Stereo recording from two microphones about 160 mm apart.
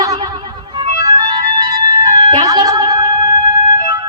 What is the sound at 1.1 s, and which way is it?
Music, 25° right (ahead or behind).